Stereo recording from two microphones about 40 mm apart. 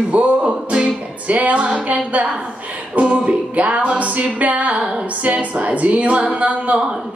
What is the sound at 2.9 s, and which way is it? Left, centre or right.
Music, right.